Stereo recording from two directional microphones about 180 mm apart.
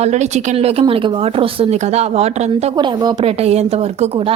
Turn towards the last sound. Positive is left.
turn(degrees=-35)  # may be behind; listen again after turning